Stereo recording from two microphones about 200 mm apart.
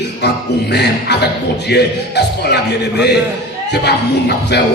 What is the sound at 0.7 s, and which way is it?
Speech, 55° left (ahead or behind).